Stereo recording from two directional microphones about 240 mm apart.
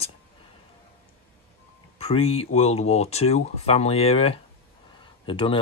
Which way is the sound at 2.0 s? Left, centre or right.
Left.